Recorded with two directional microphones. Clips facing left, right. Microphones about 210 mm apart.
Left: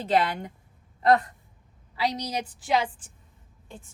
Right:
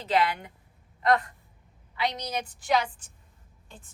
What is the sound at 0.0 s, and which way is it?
Speech, 45° left (ahead or behind).